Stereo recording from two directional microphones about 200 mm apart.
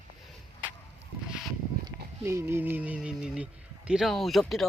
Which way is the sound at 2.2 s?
10° right (ahead or behind).